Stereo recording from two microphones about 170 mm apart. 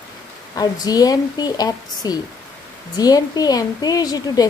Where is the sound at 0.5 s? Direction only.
20° left (ahead or behind).